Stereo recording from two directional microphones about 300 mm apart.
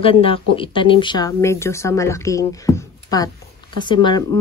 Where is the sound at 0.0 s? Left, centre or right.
Centre.